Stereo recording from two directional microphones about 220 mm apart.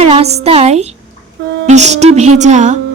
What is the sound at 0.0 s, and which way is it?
A woman's voice, 30° right (ahead or behind).